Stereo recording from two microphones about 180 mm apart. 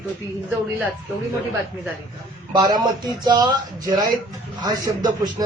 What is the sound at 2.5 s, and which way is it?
Speech, 20° right (ahead or behind).